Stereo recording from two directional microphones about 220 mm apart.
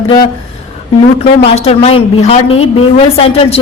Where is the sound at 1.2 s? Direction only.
25° left (ahead or behind).